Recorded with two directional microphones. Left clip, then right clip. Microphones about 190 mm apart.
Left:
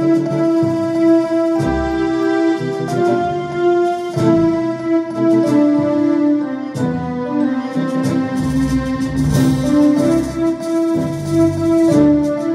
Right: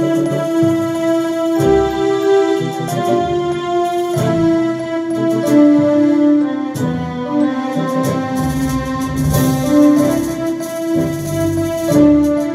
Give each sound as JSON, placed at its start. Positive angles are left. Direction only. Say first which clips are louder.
{"t": 1.6, "sound": "music", "louder": "right 5 dB", "side_deg": -30}
{"t": 3.8, "sound": "music", "louder": "even", "side_deg": -30}
{"t": 9.4, "sound": "music", "louder": "right 2 dB", "side_deg": -20}
{"t": 11.3, "sound": "music", "louder": "left 5 dB", "side_deg": -20}